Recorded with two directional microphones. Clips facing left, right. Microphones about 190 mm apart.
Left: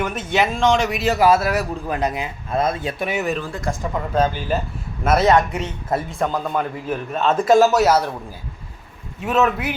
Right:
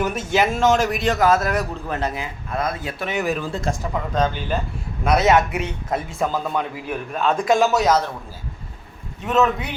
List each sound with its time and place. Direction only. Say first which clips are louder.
0.3 s a man's voice: even; 5° right (ahead or behind); by 2.2 s 15° left (ahead or behind)
2.5 s speech: left 4 dB; 25° left (ahead or behind)
3.1 s a man's voice: right 1 dB; centre (ahead or behind)
3.5 s speech: right 1 dB; 25° right (ahead or behind)
4.1 s a man's voice: left 3 dB; 10° left (ahead or behind)
9.2 s a man's voice: left 1 dB; centre (ahead or behind)